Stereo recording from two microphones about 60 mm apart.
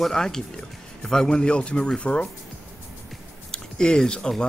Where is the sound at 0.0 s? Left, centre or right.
Centre.